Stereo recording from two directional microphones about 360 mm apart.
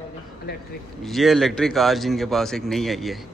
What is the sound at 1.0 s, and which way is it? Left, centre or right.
A man's voice, centre.